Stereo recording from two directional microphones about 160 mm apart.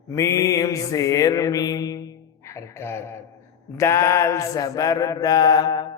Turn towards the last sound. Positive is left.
turn(degrees=25)  # may be behind; listen again after turning